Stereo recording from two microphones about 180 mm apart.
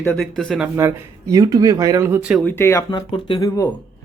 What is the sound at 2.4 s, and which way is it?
Speech, 10° left (ahead or behind).